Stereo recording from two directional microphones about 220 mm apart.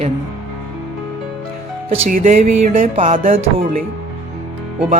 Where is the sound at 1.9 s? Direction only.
35° right (ahead or behind).